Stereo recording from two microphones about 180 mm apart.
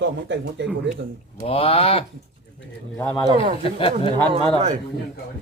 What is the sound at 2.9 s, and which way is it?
Speech, 10° left (ahead or behind).